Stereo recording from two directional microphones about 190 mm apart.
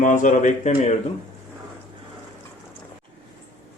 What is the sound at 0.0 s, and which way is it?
Speech, 40° left (ahead or behind).